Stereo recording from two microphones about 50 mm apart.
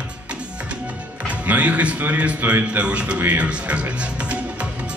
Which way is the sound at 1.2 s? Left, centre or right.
Right.